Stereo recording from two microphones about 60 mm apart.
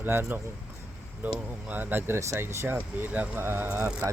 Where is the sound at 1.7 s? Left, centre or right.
Right.